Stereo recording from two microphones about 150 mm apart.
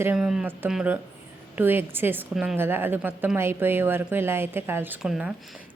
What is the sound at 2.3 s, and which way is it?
Speech, 5° right (ahead or behind).